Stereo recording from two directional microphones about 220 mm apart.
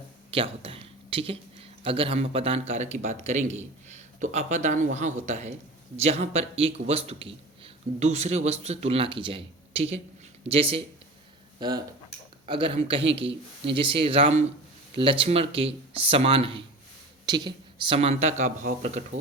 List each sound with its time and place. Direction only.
0.3 s a man's voice: 25° right (ahead or behind)